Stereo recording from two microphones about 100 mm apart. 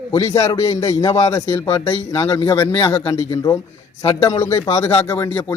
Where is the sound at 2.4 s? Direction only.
45° left (ahead or behind).